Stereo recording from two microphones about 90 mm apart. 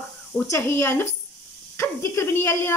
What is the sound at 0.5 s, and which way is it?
Speech, 30° left (ahead or behind).